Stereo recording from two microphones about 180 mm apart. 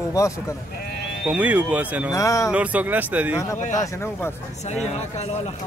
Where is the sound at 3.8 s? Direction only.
10° left (ahead or behind).